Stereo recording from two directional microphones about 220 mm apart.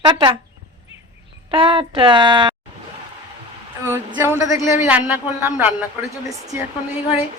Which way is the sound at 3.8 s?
10° right (ahead or behind).